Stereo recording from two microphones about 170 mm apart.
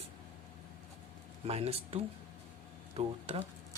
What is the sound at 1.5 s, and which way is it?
Speech, 35° right (ahead or behind).